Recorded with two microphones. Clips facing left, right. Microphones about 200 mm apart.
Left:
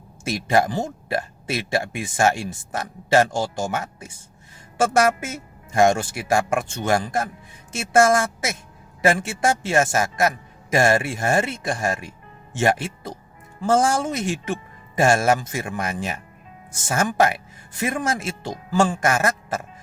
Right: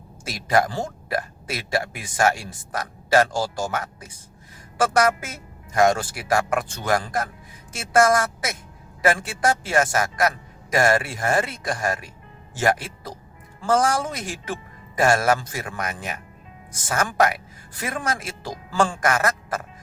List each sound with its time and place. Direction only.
0.3 s speech: 25° left (ahead or behind)